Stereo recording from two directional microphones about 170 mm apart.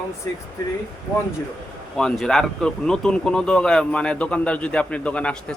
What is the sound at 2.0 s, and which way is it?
Speech, 5° left (ahead or behind).